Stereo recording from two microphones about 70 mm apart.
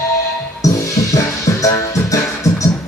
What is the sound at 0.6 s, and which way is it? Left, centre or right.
Music, left.